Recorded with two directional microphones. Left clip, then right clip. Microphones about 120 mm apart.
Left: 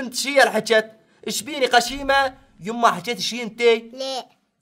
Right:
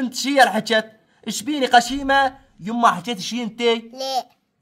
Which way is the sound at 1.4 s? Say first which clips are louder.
Right 2 dB; 35° left (ahead or behind).